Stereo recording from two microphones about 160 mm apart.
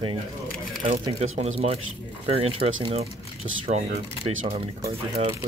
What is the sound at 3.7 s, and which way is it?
Speech, 60° right (ahead or behind).